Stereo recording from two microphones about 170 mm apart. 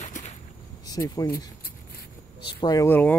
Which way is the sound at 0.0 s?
40° left (ahead or behind).